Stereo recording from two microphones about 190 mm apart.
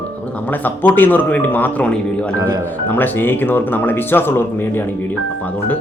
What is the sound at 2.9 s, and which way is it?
Speech, 10° left (ahead or behind).